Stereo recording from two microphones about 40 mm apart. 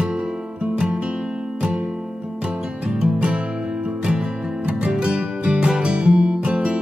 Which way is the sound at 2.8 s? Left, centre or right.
Centre.